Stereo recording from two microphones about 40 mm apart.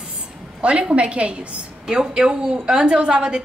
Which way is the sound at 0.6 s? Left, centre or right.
Right.